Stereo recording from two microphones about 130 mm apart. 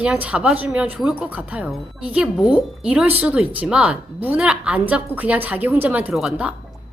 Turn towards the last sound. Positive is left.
turn(degrees=-5)  # may be behind; listen again after turning